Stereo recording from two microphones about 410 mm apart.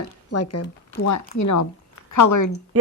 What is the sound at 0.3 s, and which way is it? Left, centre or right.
Speech, left.